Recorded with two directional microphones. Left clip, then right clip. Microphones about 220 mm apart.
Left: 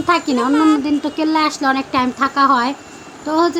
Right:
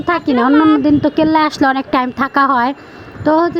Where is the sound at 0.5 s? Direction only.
Centre (ahead or behind).